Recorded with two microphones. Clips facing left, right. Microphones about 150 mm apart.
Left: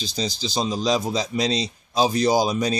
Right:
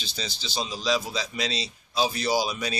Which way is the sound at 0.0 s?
40° left (ahead or behind).